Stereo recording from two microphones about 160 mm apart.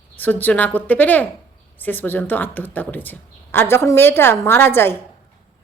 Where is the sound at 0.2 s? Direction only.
10° left (ahead or behind).